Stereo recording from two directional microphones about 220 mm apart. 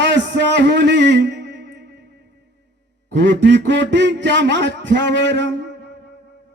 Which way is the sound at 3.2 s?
55° right (ahead or behind).